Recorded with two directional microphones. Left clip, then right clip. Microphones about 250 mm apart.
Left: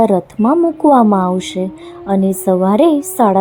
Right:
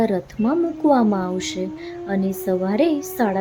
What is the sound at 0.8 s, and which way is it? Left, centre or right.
Speech, centre.